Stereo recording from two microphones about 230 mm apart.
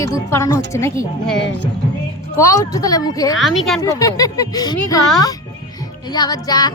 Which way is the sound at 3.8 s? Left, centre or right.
Centre.